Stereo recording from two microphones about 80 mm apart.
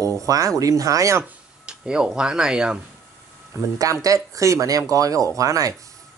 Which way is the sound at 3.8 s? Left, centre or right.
Right.